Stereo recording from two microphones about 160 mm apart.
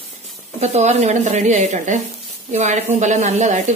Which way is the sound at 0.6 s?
45° right (ahead or behind).